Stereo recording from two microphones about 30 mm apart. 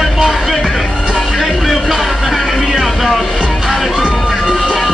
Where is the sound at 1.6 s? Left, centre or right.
Centre.